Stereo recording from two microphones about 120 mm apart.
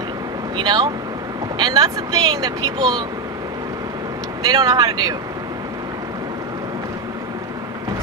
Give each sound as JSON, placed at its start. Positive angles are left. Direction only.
{"t": 0.6, "sound": "speech", "side_deg": -35}
{"t": 4.5, "sound": "speech", "side_deg": -35}